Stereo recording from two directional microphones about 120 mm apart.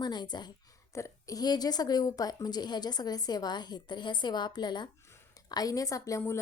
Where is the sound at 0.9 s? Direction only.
25° left (ahead or behind).